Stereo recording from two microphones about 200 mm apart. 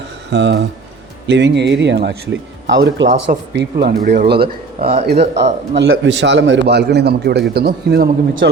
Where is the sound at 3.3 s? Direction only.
50° right (ahead or behind).